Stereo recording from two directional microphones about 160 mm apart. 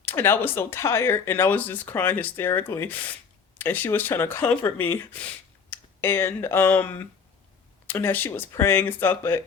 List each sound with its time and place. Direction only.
0.0 s speech: 15° left (ahead or behind)